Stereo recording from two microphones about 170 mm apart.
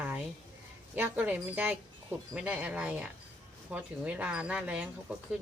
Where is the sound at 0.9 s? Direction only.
10° right (ahead or behind).